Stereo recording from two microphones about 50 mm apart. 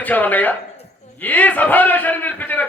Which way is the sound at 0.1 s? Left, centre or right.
Left.